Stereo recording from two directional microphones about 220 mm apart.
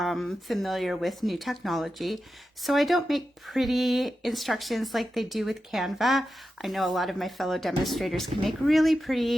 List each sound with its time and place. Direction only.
0.0 s speech: centre (ahead or behind)